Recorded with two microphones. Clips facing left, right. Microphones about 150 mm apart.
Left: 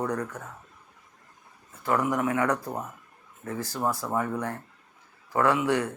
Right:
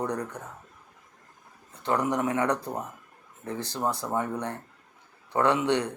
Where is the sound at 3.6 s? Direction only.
20° right (ahead or behind).